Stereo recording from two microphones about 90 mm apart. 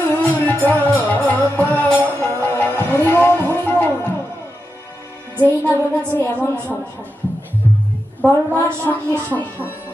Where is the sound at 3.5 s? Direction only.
20° left (ahead or behind).